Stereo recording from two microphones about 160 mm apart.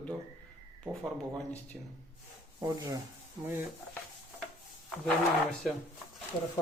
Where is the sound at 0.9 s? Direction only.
20° right (ahead or behind).